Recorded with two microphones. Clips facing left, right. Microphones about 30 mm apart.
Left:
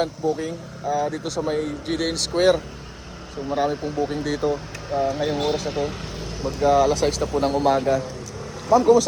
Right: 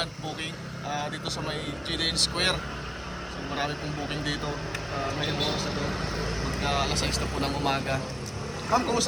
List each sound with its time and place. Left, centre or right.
0.0 s speech: right
4.4 s speech: centre
5.4 s speech: right
5.6 s speech: centre
6.4 s speech: right